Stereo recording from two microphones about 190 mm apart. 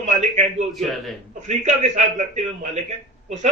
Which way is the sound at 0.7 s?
Centre (ahead or behind).